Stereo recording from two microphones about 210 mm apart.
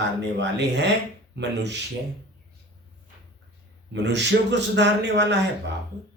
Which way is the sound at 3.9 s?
55° right (ahead or behind).